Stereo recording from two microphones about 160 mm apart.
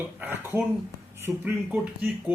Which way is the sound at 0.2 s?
10° right (ahead or behind).